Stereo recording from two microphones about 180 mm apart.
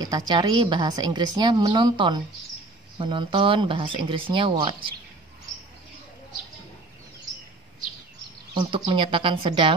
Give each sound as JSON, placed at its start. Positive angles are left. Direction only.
{"t": 0.0, "sound": "a woman's voice", "side_deg": -20}
{"t": 8.5, "sound": "a woman's voice", "side_deg": -30}